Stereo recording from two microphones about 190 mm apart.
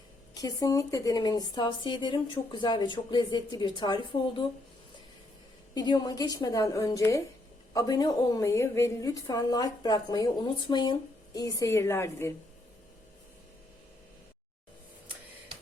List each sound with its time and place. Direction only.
0.3 s speech: 20° left (ahead or behind)
5.7 s a woman's voice: 20° left (ahead or behind)